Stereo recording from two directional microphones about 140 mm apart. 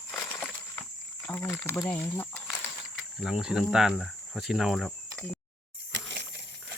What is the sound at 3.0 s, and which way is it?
Speech, 5° right (ahead or behind).